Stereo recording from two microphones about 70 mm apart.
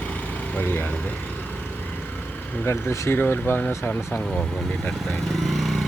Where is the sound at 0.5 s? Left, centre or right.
Left.